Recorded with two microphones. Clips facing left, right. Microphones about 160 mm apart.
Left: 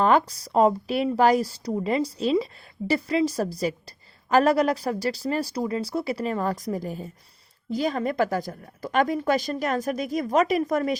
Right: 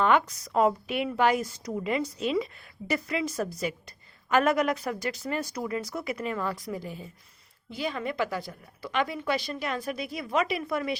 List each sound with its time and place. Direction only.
0.0 s a woman's voice: 35° left (ahead or behind)